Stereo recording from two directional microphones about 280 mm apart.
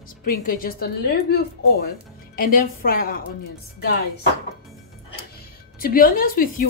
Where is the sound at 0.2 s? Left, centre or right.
Left.